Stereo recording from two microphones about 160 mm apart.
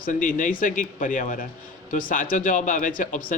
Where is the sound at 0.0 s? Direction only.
55° left (ahead or behind).